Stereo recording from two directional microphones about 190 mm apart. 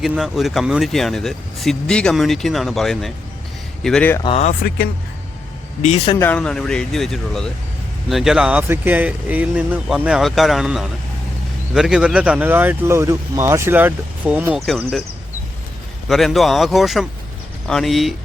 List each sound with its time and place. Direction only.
0.0 s speech: centre (ahead or behind)
4.2 s speech: 30° left (ahead or behind)
5.8 s speech: 35° left (ahead or behind)
6.1 s speech: 10° left (ahead or behind); by 14.6 s 10° right (ahead or behind)
16.0 s speech: centre (ahead or behind)